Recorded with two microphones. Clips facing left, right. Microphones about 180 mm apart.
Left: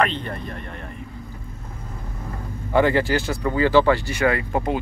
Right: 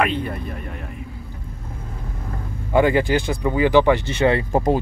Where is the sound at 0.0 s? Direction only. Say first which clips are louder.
Right 1 dB; 10° right (ahead or behind).